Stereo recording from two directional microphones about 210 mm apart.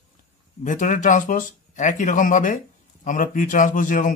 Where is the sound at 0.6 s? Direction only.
35° left (ahead or behind).